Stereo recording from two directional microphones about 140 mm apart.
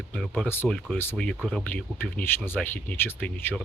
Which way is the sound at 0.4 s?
15° left (ahead or behind).